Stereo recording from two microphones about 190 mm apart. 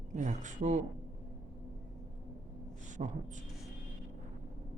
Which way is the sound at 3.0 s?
40° right (ahead or behind).